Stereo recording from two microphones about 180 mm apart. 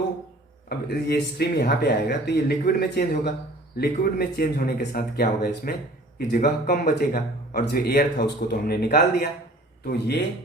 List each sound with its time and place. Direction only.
0.7 s speech: 60° left (ahead or behind)